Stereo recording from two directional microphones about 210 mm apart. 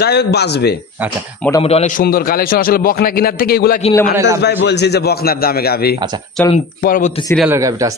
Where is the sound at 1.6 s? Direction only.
30° left (ahead or behind).